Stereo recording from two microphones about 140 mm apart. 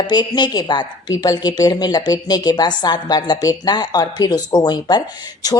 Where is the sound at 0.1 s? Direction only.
30° left (ahead or behind).